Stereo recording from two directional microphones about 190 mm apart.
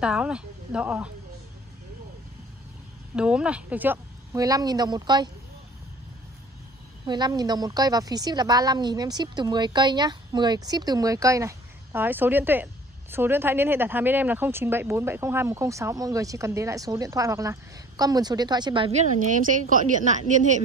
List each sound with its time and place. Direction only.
0.0 s speech: 5° right (ahead or behind)
3.2 s a woman's voice: 5° right (ahead or behind); by 5.3 s 20° right (ahead or behind)
7.1 s a woman's voice: 20° right (ahead or behind); by 20.6 s 40° right (ahead or behind)